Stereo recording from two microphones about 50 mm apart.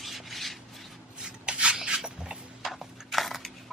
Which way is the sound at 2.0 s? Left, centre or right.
Centre.